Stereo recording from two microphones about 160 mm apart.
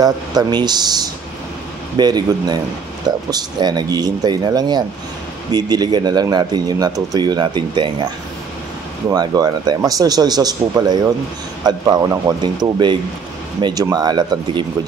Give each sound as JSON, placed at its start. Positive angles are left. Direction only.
{"t": 0.0, "sound": "speech", "side_deg": -25}
{"t": 9.1, "sound": "speech", "side_deg": -25}